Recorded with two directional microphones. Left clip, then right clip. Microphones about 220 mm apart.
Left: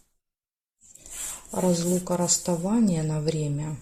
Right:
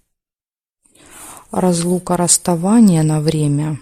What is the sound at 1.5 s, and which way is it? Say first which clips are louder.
Speech: right 8 dB; 50° right (ahead or behind).